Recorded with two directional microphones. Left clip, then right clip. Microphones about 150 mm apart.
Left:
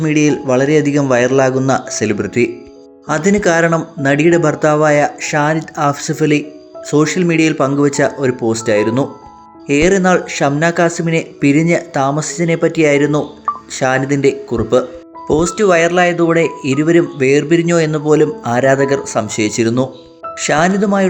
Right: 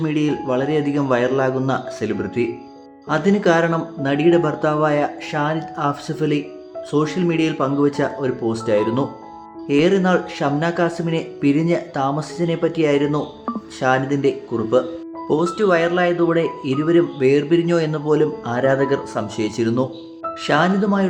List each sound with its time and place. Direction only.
0.0 s speech: 35° left (ahead or behind)